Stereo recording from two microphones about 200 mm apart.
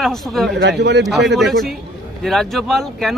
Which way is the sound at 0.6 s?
55° right (ahead or behind).